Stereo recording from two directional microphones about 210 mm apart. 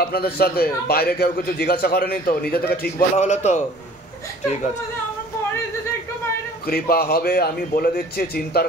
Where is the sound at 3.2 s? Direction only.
35° left (ahead or behind).